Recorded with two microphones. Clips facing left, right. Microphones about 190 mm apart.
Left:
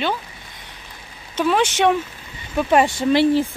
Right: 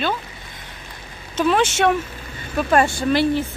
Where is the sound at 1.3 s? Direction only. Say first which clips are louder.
Even; 15° left (ahead or behind).